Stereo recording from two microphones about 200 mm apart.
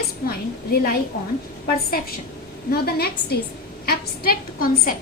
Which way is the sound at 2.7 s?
50° left (ahead or behind).